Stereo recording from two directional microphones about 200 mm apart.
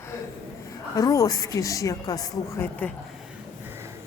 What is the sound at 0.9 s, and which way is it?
Speech, 15° left (ahead or behind).